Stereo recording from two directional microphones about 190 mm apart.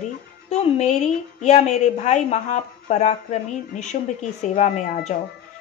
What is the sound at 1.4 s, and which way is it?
Speech, 35° left (ahead or behind).